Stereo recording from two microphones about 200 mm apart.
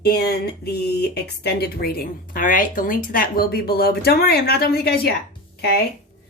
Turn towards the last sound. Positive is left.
turn(degrees=55)  # may be behind; listen again after turning